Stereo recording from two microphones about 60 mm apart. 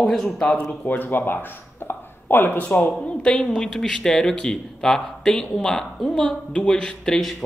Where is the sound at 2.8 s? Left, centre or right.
Centre.